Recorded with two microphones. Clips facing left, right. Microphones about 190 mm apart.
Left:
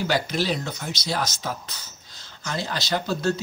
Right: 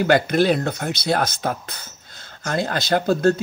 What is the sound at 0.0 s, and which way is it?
Speech, 55° right (ahead or behind).